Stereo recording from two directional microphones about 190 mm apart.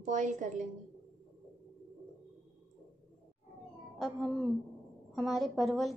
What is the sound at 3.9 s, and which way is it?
A woman's voice, centre (ahead or behind).